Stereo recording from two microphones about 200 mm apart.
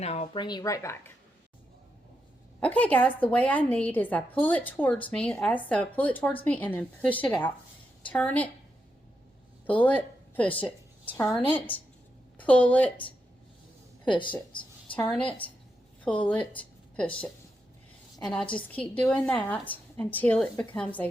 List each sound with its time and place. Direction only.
0.0 s speech: 30° left (ahead or behind); by 0.9 s 15° left (ahead or behind)
2.6 s a woman's voice: 5° left (ahead or behind)
9.6 s a woman's voice: 10° left (ahead or behind)
14.9 s a woman's voice: 5° left (ahead or behind)
18.5 s a woman's voice: 5° left (ahead or behind)